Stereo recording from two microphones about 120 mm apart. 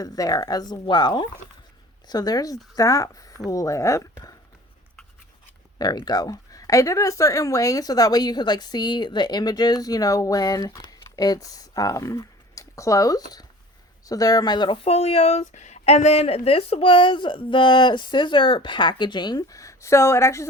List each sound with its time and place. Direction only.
0.0 s speech: 30° left (ahead or behind)
5.8 s speech: 35° left (ahead or behind)
14.8 s a woman's voice: 55° left (ahead or behind); by 20.5 s 25° left (ahead or behind)